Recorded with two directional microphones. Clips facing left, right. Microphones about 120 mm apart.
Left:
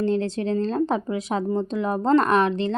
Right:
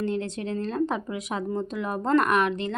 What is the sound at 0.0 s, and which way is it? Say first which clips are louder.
Speech: left 5 dB; 30° left (ahead or behind).